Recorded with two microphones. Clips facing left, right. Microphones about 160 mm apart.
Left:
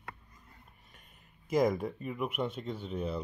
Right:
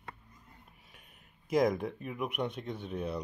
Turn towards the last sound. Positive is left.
turn(degrees=5)  # may be behind; listen again after turning